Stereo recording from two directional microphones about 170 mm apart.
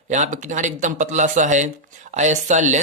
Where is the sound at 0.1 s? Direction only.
45° right (ahead or behind).